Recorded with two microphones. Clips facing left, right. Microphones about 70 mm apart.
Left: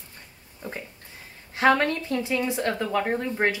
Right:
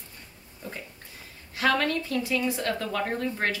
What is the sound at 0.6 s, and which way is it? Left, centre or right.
Speech, left.